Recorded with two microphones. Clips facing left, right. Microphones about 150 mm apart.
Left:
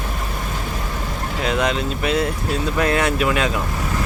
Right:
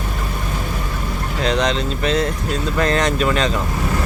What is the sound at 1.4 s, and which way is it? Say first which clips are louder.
Speech: right 2 dB; 5° left (ahead or behind).